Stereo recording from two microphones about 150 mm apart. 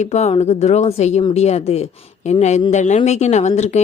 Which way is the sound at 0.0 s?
45° left (ahead or behind).